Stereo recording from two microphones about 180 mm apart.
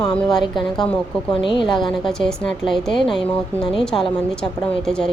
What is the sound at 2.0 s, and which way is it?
Speech, 5° left (ahead or behind).